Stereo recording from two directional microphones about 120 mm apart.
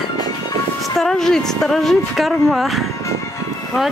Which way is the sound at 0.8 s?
5° left (ahead or behind).